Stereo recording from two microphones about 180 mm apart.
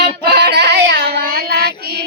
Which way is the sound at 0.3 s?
65° right (ahead or behind).